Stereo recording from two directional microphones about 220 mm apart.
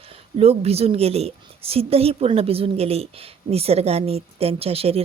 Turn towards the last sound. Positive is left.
turn(degrees=-25)  # may be behind; listen again after turning